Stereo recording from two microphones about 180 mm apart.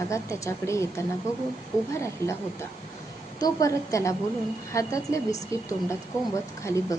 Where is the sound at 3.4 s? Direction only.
20° left (ahead or behind).